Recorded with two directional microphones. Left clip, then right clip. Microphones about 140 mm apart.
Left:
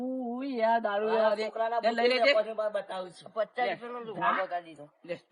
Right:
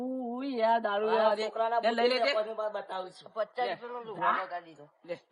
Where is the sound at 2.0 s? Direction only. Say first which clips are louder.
Left 3 dB; 25° right (ahead or behind).